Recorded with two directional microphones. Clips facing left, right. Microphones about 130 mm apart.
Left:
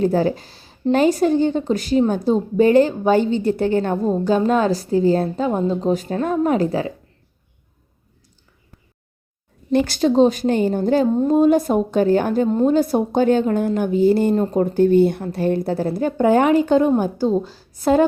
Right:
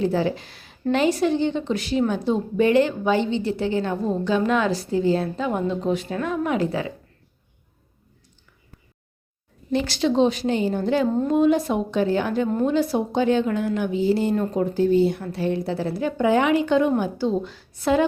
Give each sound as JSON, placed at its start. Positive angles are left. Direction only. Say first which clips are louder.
{"t": 0.0, "sound": "speech", "louder": "left 4 dB", "side_deg": 45}
{"t": 9.7, "sound": "a woman's voice", "louder": "left 5 dB", "side_deg": 50}